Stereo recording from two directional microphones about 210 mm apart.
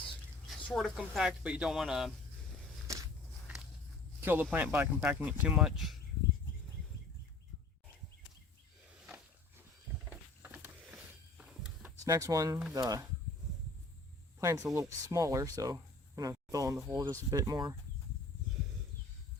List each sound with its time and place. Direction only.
0.4 s speech: centre (ahead or behind)
2.8 s walk: 15° right (ahead or behind)
4.2 s speech: 10° right (ahead or behind)
10.1 s a sound: 10° right (ahead or behind)
12.7 s speech: 15° right (ahead or behind)
14.4 s speech: 15° right (ahead or behind)